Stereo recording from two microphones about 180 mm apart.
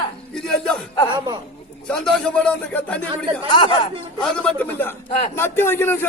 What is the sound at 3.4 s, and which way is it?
Speech, 25° left (ahead or behind).